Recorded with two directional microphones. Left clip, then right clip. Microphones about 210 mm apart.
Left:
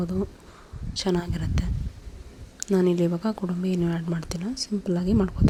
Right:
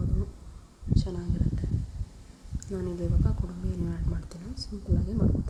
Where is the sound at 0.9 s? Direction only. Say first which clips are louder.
Left 9 dB; 45° left (ahead or behind).